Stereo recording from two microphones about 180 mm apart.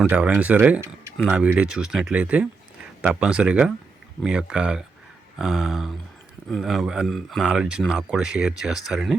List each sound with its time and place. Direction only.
0.0 s speech: 10° right (ahead or behind)